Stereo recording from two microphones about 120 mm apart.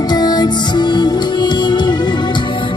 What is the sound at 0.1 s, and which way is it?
Music, 35° left (ahead or behind).